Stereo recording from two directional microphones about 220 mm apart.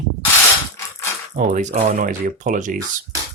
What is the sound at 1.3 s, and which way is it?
Speech, 35° right (ahead or behind).